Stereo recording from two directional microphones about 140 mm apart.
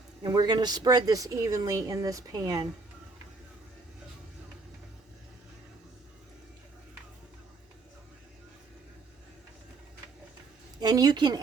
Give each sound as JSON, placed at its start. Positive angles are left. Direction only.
{"t": 0.2, "sound": "speech", "side_deg": -30}
{"t": 10.8, "sound": "speech", "side_deg": -30}